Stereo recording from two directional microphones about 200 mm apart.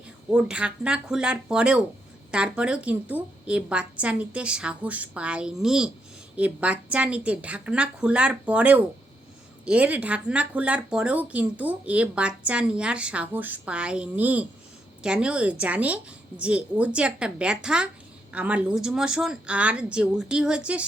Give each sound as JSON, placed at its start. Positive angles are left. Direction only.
{"t": 0.3, "sound": "a woman's voice", "side_deg": -5}